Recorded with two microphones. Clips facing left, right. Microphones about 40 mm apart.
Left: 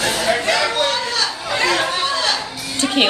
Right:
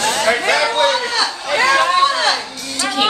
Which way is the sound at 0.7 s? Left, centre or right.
Right.